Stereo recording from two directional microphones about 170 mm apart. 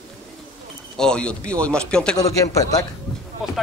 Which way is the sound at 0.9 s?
5° left (ahead or behind).